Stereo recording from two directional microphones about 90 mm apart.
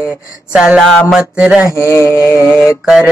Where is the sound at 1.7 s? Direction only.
30° left (ahead or behind).